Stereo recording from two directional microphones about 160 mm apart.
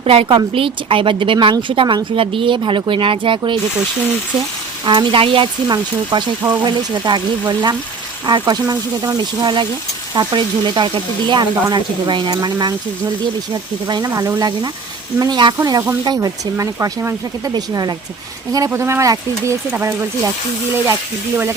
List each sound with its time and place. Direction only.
0.0 s a woman's voice: 35° right (ahead or behind)
4.9 s speech: 30° right (ahead or behind)